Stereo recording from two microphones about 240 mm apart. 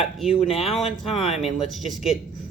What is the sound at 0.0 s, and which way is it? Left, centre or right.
Speech, centre.